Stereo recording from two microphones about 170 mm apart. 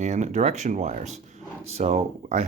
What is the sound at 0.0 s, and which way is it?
Speech, 45° right (ahead or behind).